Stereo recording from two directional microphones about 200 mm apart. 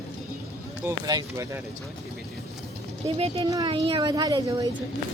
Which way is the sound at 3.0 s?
30° right (ahead or behind).